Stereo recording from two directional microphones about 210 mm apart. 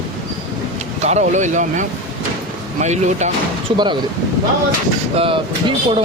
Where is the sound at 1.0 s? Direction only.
35° right (ahead or behind).